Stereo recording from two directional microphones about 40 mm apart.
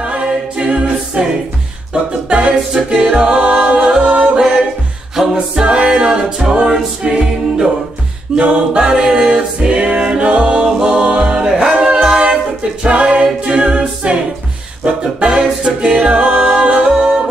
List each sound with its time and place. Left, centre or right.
0.0 s a capella: right
4.0 s music: right
5.1 s a capella: centre
5.6 s a capella: right
8.4 s a capella: right
14.0 s music: right
15.3 s music: right
16.6 s a capella: right
16.9 s music: centre